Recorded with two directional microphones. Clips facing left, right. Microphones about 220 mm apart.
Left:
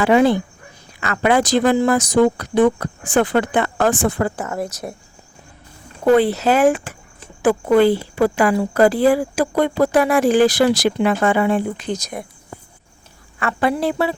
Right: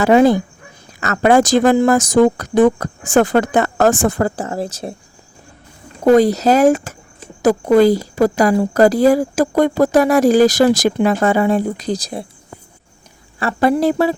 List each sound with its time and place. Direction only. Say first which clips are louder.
0.0 s a woman's voice: right 3 dB; 40° right (ahead or behind)
6.1 s a woman's voice: right 3 dB; 40° right (ahead or behind)
13.4 s a woman's voice: right 5 dB; 40° right (ahead or behind)